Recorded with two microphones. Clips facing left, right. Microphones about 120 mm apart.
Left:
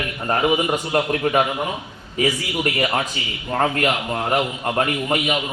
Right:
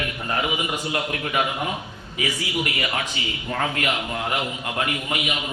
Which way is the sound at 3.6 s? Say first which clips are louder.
Left 6 dB; 40° left (ahead or behind).